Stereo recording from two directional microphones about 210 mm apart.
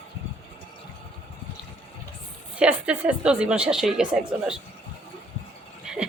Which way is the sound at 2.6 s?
5° right (ahead or behind).